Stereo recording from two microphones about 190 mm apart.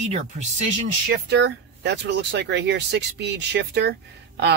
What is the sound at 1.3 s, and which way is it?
Speech, 65° right (ahead or behind).